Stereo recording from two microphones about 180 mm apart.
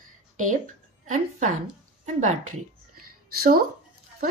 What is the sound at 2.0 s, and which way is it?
Speech, 45° right (ahead or behind).